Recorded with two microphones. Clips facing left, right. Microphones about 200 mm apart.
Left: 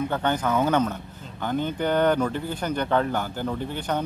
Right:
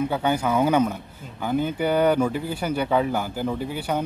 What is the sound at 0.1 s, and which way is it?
A man's voice, 10° right (ahead or behind).